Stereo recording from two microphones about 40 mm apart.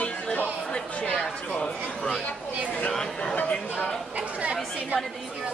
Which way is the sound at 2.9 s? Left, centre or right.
Centre.